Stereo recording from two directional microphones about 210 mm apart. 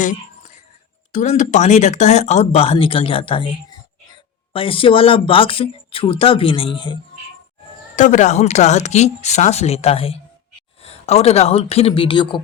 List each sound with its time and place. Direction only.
1.1 s speech: 35° left (ahead or behind)
4.5 s speech: 25° left (ahead or behind)
7.9 s speech: 35° left (ahead or behind)